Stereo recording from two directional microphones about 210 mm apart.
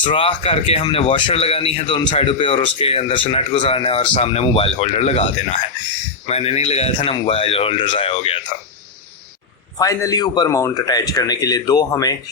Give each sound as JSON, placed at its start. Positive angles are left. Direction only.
{"t": 0.0, "sound": "speech", "side_deg": 25}
{"t": 9.7, "sound": "speech", "side_deg": 15}